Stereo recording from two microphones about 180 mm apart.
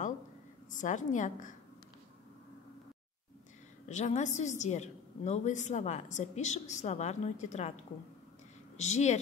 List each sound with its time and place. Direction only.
0.7 s a woman's voice: 45° left (ahead or behind)
3.8 s a woman's voice: 40° left (ahead or behind)